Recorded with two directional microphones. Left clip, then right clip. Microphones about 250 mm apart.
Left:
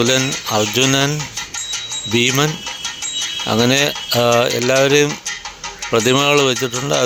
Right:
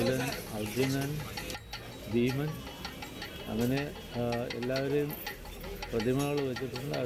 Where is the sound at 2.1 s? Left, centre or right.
Left.